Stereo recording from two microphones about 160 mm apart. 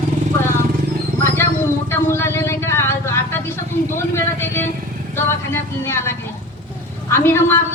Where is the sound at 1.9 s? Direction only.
15° left (ahead or behind).